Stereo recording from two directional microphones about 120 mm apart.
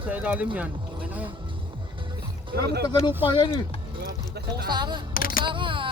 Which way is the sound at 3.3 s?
40° left (ahead or behind).